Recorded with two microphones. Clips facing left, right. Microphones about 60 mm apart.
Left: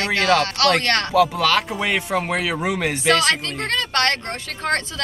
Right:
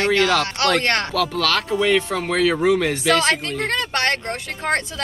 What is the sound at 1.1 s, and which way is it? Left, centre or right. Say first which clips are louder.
Speech: left 4 dB; left.